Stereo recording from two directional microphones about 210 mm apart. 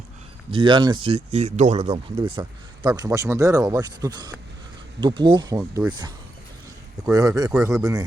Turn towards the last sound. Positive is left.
turn(degrees=-15)  # may be behind; listen again after turning